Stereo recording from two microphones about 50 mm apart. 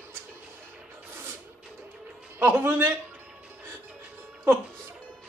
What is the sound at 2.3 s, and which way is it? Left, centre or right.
Speech, right.